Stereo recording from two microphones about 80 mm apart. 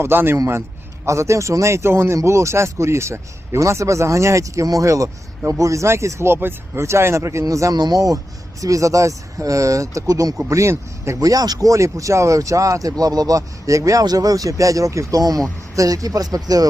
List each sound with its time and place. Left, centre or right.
0.0 s a man's voice: right
0.3 s speech: right
7.8 s speech: right